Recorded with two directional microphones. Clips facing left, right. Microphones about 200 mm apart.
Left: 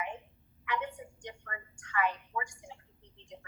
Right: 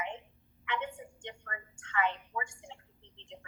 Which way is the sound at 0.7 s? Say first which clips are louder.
Left 1 dB; 25° right (ahead or behind).